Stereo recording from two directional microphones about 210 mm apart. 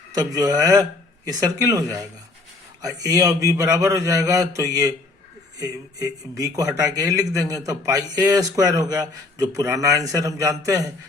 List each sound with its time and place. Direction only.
0.1 s speech: 20° right (ahead or behind)